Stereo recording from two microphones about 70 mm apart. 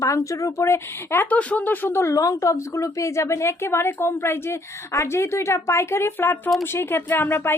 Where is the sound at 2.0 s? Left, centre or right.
Left.